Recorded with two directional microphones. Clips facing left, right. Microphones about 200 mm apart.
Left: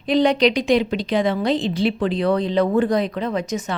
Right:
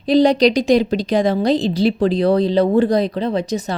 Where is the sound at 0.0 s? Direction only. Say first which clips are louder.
Right 4 dB; 35° right (ahead or behind).